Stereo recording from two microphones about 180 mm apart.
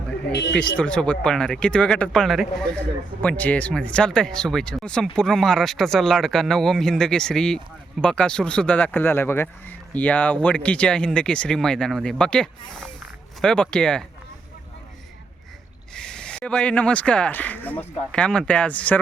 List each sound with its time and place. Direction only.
0.3 s speech: 75° left (ahead or behind)
0.5 s speech: 5° left (ahead or behind)
16.0 s speech: 5° left (ahead or behind)